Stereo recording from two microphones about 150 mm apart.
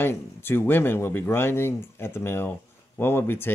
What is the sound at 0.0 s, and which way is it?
Speech, 15° left (ahead or behind).